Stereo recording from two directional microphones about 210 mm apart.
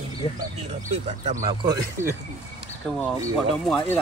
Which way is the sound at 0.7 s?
30° right (ahead or behind).